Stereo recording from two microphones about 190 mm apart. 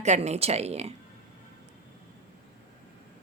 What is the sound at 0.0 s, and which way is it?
Speech, 35° right (ahead or behind).